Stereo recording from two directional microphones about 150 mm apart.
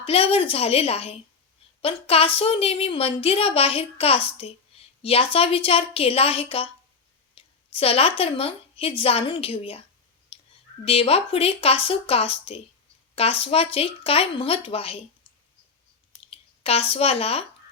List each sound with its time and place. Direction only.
0.0 s a woman's voice: 40° left (ahead or behind)
10.3 s a sound: 40° left (ahead or behind)
10.8 s a woman's voice: 40° left (ahead or behind)
16.3 s speech: 40° left (ahead or behind)